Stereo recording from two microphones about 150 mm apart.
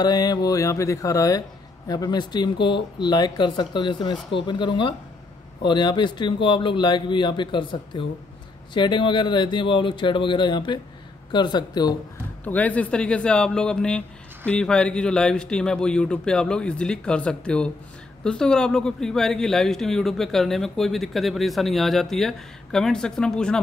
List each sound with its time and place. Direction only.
0.0 s a man's voice: 25° left (ahead or behind)
12.4 s a man's voice: 10° left (ahead or behind)